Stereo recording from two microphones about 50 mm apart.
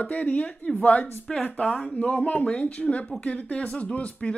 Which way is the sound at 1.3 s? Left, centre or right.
Centre.